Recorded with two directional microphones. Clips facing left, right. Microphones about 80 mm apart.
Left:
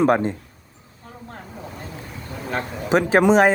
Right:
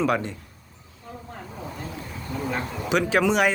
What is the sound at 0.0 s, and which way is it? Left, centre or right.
Speech, left.